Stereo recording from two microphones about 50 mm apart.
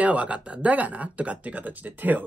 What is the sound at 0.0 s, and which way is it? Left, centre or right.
Speech, right.